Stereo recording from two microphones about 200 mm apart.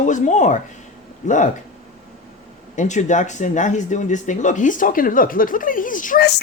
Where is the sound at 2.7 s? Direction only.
35° left (ahead or behind).